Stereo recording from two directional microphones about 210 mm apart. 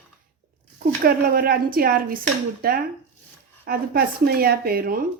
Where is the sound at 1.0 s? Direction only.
45° right (ahead or behind).